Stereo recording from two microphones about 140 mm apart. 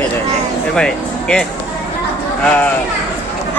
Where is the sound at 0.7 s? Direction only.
5° left (ahead or behind).